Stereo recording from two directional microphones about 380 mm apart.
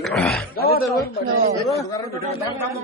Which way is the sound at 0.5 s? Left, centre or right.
Left.